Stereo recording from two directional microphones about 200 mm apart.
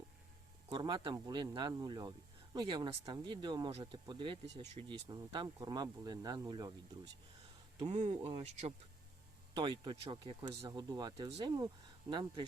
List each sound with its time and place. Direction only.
0.7 s speech: 20° right (ahead or behind)
7.8 s speech: 35° right (ahead or behind)